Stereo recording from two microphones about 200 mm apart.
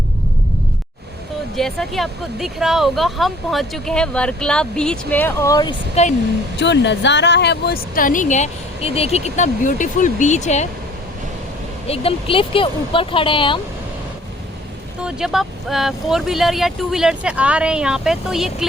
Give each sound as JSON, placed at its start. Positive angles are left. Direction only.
{"t": 1.5, "sound": "speech", "side_deg": 0}
{"t": 5.9, "sound": "speech", "side_deg": 35}
{"t": 6.6, "sound": "speech", "side_deg": 60}
{"t": 11.9, "sound": "speech", "side_deg": 25}
{"t": 15.0, "sound": "speech", "side_deg": 0}